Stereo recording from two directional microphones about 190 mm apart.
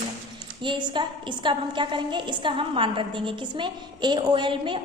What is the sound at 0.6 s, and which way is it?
A woman's voice, 25° right (ahead or behind).